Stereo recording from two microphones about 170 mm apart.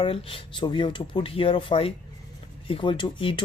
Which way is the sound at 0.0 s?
30° left (ahead or behind).